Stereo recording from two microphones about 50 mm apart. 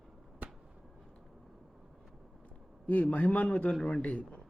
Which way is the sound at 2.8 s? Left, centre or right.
Left.